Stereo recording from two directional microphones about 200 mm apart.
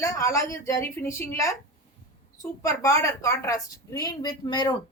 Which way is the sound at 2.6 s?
15° left (ahead or behind).